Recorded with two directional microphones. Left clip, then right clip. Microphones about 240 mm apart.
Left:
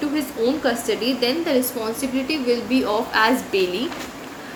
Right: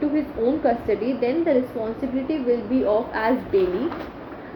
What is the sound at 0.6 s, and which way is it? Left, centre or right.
Speech, centre.